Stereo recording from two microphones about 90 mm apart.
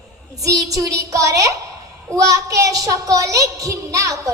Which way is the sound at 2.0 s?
40° right (ahead or behind).